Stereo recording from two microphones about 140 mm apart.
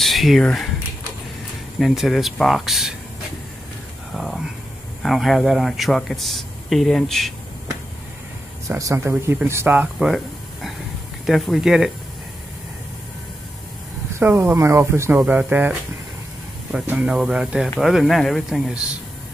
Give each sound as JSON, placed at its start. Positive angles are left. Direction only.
{"t": 0.0, "sound": "speech", "side_deg": 0}
{"t": 1.8, "sound": "speech", "side_deg": 0}
{"t": 4.1, "sound": "a sound", "side_deg": 0}
{"t": 5.0, "sound": "speech", "side_deg": 0}
{"t": 8.6, "sound": "speech", "side_deg": -20}
{"t": 9.9, "sound": "a sound", "side_deg": 0}
{"t": 11.2, "sound": "speech", "side_deg": 0}
{"t": 14.2, "sound": "speech", "side_deg": -15}